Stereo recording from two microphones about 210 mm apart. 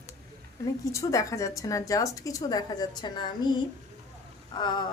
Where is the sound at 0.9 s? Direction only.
15° left (ahead or behind).